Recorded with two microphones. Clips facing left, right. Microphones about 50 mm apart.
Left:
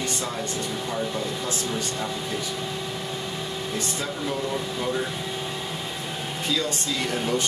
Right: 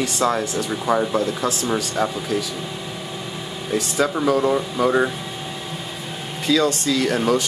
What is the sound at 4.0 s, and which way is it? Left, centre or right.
Speech, right.